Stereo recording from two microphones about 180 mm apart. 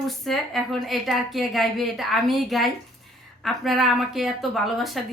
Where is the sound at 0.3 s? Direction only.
Centre (ahead or behind).